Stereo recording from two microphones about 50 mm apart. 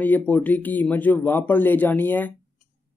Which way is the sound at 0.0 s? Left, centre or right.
Left.